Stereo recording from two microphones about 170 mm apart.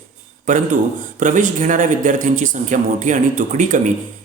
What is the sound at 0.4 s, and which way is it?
A man's voice, 50° right (ahead or behind).